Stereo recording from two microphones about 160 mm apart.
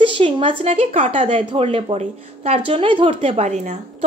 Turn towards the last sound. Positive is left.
turn(degrees=-45)  # may be behind; listen again after turning